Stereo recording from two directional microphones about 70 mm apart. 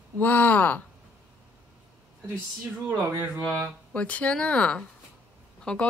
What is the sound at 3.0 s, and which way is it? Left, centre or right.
Speech, right.